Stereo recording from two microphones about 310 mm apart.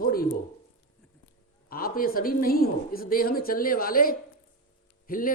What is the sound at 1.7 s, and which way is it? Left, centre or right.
A man's voice, left.